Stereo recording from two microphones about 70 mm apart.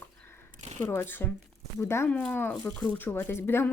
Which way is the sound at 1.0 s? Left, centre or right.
Left.